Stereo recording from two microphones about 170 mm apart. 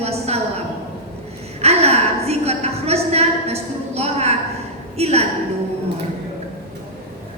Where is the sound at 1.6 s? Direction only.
40° right (ahead or behind).